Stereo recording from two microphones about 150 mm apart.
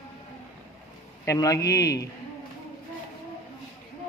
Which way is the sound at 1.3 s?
20° left (ahead or behind).